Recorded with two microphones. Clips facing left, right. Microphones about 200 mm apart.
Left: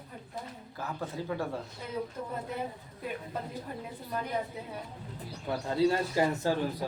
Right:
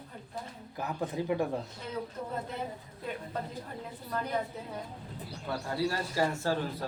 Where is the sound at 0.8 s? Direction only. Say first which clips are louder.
Right 3 dB; 15° right (ahead or behind).